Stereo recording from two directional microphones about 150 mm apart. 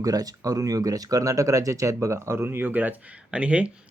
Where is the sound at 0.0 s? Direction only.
25° right (ahead or behind).